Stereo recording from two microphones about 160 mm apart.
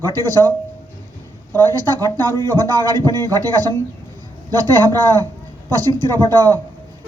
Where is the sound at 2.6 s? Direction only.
25° right (ahead or behind).